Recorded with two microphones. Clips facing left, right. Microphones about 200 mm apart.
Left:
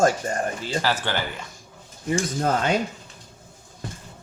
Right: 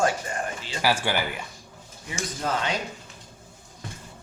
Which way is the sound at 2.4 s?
45° left (ahead or behind).